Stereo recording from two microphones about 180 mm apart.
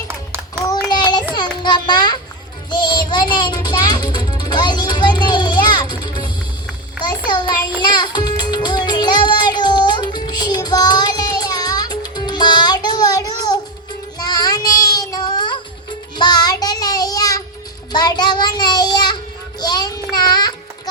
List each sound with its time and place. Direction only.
1.4 s a child's voice: 25° left (ahead or behind)
7.9 s music: 25° left (ahead or behind)
14.2 s child singing: 20° left (ahead or behind)